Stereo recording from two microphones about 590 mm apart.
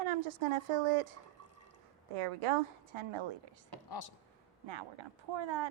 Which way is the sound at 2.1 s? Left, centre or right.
Right.